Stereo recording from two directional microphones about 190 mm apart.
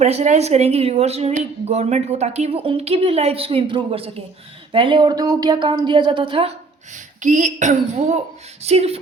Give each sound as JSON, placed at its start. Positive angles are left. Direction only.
{"t": 0.0, "sound": "a woman's voice", "side_deg": -35}